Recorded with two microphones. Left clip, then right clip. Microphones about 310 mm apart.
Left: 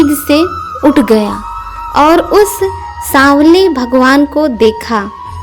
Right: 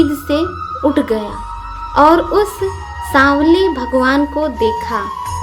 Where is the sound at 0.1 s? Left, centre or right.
Left.